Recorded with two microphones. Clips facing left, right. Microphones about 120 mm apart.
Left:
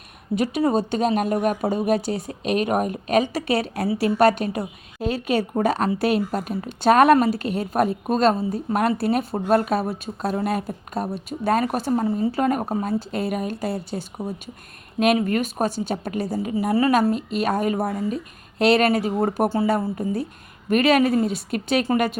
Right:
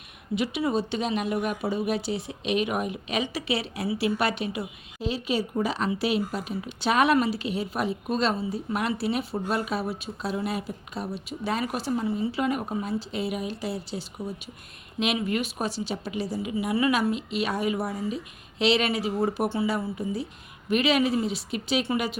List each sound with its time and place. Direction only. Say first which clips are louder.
0.3 s a woman's voice: left 5 dB; 45° left (ahead or behind)